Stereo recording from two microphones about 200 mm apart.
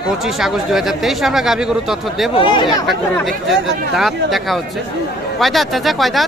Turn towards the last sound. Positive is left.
turn(degrees=0)  # may be behind; listen again after turning